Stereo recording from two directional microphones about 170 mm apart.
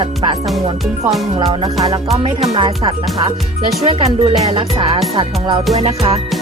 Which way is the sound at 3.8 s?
35° right (ahead or behind).